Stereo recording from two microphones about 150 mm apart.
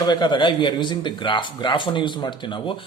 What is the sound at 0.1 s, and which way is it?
Speech, 30° left (ahead or behind).